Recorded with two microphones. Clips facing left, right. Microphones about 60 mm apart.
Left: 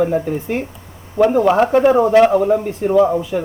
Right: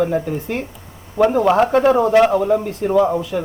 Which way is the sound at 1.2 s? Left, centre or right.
Centre.